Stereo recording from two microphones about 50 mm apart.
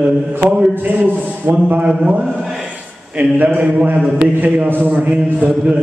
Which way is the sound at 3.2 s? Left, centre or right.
Right.